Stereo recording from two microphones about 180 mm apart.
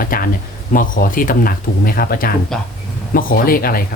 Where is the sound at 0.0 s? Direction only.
55° left (ahead or behind).